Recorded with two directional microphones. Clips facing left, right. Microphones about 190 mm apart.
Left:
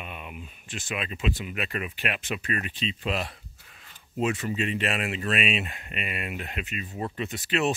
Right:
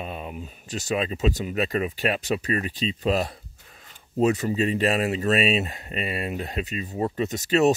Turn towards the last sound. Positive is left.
turn(degrees=-40)  # may be behind; listen again after turning